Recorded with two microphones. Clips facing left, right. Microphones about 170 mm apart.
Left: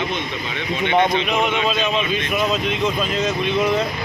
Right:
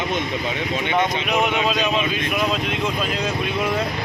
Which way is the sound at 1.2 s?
5° right (ahead or behind).